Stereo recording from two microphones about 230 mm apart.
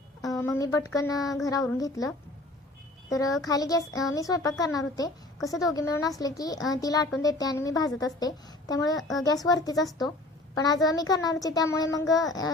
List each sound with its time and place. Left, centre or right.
0.2 s a sound: centre
1.5 s a child's voice: centre
9.0 s a woman's voice: centre
9.2 s a child's voice: centre